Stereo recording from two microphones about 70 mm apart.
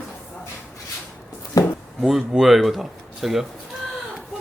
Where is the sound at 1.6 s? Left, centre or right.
Left.